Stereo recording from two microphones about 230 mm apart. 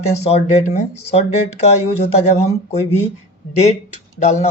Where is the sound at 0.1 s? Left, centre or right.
Left.